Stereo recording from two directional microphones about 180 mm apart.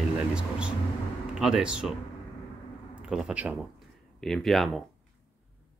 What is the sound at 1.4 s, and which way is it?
Speech, 5° right (ahead or behind).